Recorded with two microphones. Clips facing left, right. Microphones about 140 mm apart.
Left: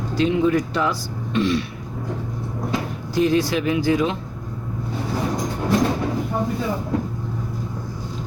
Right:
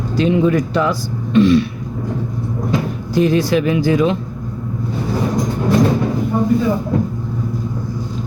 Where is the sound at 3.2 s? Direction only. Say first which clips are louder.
Right 4 dB; 60° right (ahead or behind).